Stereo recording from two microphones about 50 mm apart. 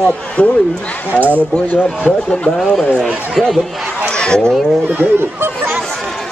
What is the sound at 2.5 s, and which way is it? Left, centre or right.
Speech, centre.